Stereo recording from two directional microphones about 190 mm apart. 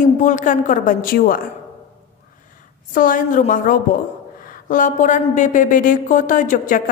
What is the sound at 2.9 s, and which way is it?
A woman's voice, 45° left (ahead or behind).